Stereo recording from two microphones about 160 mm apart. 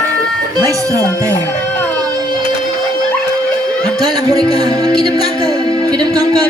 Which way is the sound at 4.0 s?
25° right (ahead or behind).